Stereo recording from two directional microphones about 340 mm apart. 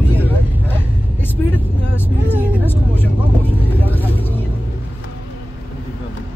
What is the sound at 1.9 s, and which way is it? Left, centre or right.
Vehicle, centre.